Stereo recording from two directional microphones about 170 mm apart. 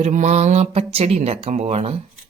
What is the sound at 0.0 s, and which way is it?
Speech, 45° right (ahead or behind).